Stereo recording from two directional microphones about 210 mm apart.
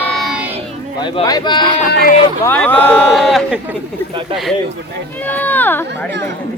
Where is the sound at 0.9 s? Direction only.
20° left (ahead or behind).